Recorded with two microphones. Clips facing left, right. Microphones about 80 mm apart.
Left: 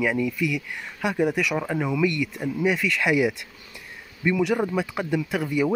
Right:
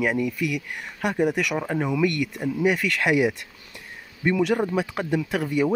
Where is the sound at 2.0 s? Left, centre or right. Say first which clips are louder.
Even; right.